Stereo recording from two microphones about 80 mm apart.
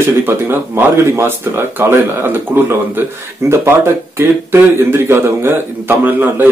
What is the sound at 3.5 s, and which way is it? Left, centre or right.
Speech, right.